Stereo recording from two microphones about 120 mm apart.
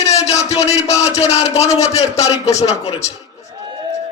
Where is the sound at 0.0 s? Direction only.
65° left (ahead or behind).